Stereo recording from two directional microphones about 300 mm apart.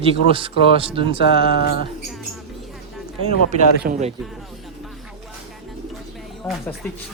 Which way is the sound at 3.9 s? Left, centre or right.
Right.